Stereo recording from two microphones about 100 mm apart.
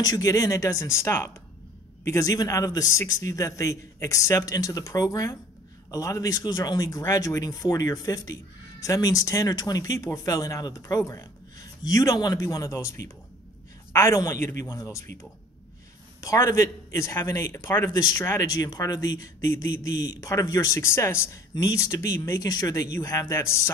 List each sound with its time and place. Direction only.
0.0 s a man's voice: 40° left (ahead or behind)
16.2 s a man's voice: 35° left (ahead or behind)
20.8 s a man's voice: 25° left (ahead or behind)